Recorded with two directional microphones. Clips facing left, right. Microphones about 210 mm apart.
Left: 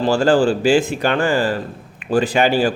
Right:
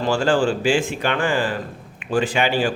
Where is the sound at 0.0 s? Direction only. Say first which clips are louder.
Left 4 dB; 40° left (ahead or behind).